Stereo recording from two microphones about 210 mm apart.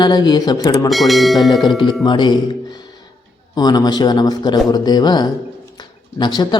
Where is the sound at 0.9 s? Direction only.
Centre (ahead or behind).